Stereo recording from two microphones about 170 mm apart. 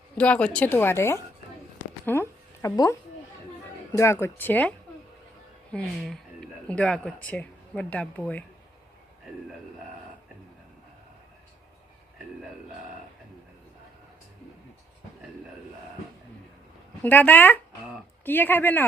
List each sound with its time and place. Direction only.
0.2 s speech: 5° left (ahead or behind)
1.8 s a sound: 15° left (ahead or behind)
3.9 s speech: 15° left (ahead or behind)
5.7 s speech: 5° left (ahead or behind)
17.0 s speech: 10° left (ahead or behind)